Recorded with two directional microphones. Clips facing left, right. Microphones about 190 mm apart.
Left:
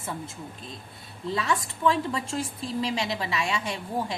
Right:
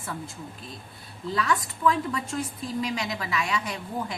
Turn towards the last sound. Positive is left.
turn(degrees=30)  # may be behind; listen again after turning